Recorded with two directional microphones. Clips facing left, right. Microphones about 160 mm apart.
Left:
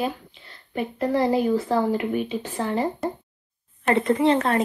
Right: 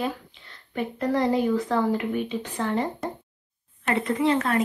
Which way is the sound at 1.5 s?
30° left (ahead or behind).